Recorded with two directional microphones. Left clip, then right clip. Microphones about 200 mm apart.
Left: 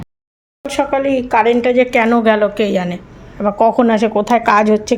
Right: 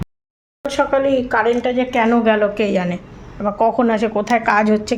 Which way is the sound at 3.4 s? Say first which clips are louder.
Left 4 dB; 20° left (ahead or behind).